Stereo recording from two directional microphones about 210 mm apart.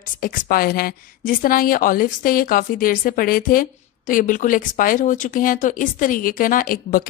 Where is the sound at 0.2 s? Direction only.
45° left (ahead or behind).